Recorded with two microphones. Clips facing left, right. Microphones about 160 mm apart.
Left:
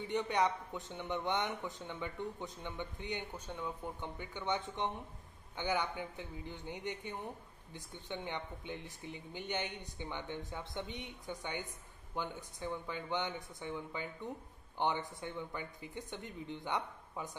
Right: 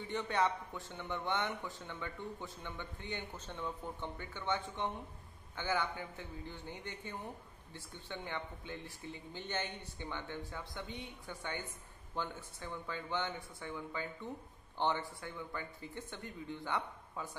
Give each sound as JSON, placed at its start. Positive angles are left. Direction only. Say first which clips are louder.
{"t": 0.1, "sound": "speech", "louder": "left 1 dB", "side_deg": 15}